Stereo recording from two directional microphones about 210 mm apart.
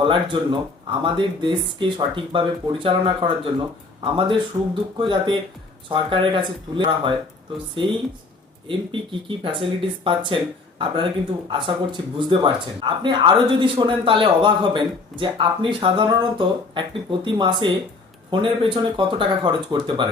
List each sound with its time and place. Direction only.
0.0 s speech: 25° right (ahead or behind)